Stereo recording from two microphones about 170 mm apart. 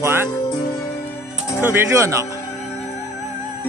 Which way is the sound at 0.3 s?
25° left (ahead or behind).